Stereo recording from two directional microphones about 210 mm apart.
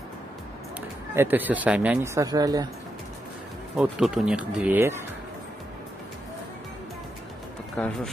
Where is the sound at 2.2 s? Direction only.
15° right (ahead or behind).